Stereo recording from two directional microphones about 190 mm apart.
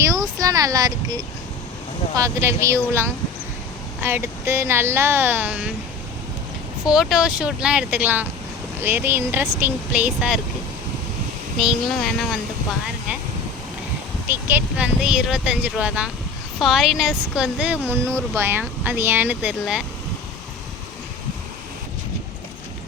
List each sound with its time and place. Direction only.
0.0 s speech: 15° right (ahead or behind)
6.8 s speech: centre (ahead or behind)
11.6 s speech: centre (ahead or behind)
14.3 s speech: 10° right (ahead or behind)
17.8 s speech: 5° left (ahead or behind)
18.3 s speech: 10° right (ahead or behind)